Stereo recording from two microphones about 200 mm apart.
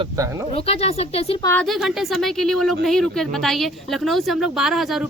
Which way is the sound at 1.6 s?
Centre (ahead or behind).